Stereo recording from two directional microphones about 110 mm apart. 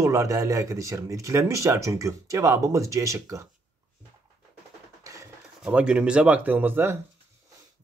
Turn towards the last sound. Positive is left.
turn(degrees=-20)  # may be behind; listen again after turning